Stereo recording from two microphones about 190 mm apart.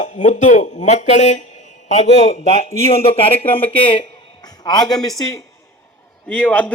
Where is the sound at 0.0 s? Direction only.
40° left (ahead or behind).